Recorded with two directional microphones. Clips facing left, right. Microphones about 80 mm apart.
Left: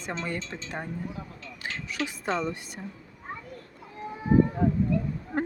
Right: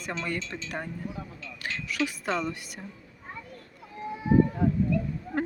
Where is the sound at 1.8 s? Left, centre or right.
Left.